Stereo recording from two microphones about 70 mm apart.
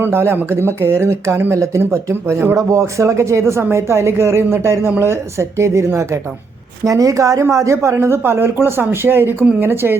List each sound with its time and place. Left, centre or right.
0.0 s a woman's voice: right
7.9 s speech: right